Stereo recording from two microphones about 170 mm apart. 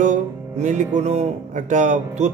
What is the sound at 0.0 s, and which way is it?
Music, 45° right (ahead or behind).